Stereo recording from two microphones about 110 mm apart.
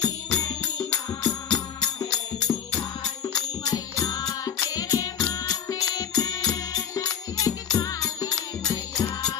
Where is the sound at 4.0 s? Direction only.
35° left (ahead or behind).